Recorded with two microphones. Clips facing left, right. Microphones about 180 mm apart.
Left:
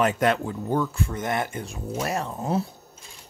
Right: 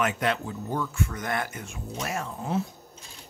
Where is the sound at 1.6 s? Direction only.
35° left (ahead or behind).